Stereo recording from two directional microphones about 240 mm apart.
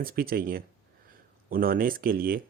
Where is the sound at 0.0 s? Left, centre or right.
Right.